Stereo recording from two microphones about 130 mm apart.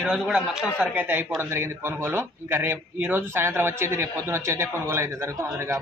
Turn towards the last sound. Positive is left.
turn(degrees=-20)  # may be behind; listen again after turning